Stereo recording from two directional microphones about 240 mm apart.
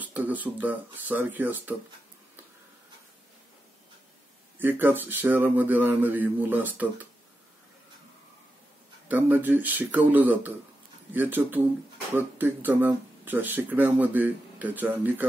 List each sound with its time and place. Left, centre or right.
0.0 s speech: centre
4.6 s speech: centre
9.1 s speech: centre